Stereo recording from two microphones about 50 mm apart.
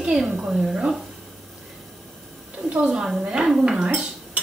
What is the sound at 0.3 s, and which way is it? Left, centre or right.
Speech, right.